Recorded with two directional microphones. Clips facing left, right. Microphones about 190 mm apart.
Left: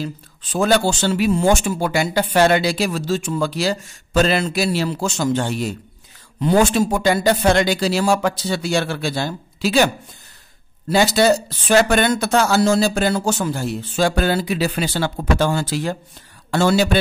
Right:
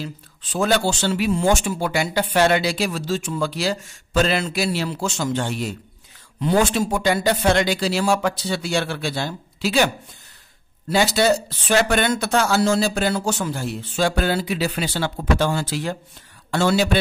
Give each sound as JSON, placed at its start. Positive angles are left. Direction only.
{"t": 0.0, "sound": "speech", "side_deg": 45}
{"t": 10.9, "sound": "speech", "side_deg": 40}